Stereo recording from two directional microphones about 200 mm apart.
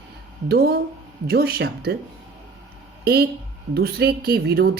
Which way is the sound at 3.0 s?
50° right (ahead or behind).